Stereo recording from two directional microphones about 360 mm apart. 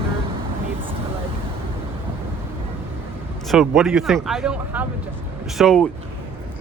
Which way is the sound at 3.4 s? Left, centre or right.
Centre.